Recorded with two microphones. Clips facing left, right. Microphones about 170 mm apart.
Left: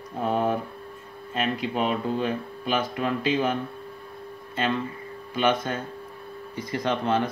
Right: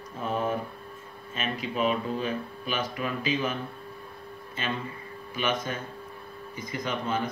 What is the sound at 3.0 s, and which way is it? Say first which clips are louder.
Speech: left 4 dB; 60° left (ahead or behind).